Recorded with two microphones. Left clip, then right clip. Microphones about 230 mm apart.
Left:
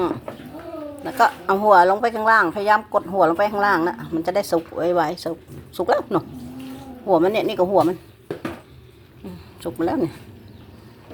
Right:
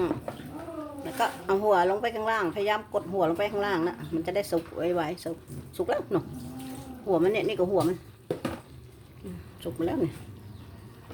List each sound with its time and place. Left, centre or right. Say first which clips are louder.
1.2 s a woman's voice: left 9 dB; left
9.7 s speech: left 7 dB; centre